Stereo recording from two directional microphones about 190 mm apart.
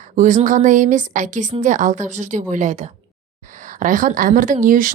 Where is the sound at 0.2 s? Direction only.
40° right (ahead or behind).